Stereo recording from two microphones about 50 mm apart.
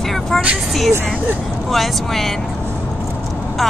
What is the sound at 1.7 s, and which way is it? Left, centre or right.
Speech, centre.